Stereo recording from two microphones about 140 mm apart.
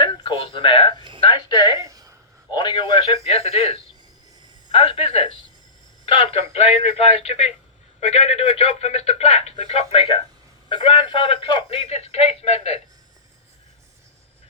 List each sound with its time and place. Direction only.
0.0 s speech: 35° left (ahead or behind)
1.8 s a sound: 25° right (ahead or behind)
2.5 s a man's voice: 35° left (ahead or behind)
3.2 s speech: 50° left (ahead or behind)